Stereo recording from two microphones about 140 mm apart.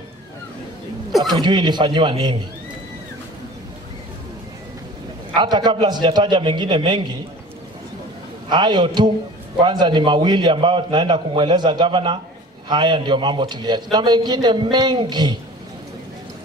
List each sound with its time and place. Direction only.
1.2 s a man's voice: 30° right (ahead or behind)
5.4 s a man's voice: 35° right (ahead or behind)
8.5 s a man's voice: 30° right (ahead or behind)